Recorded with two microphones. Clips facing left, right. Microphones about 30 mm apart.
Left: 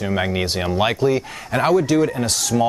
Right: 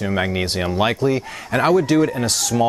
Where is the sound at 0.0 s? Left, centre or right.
Centre.